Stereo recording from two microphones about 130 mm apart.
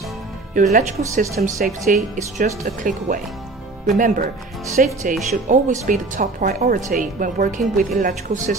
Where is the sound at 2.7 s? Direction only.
90° right.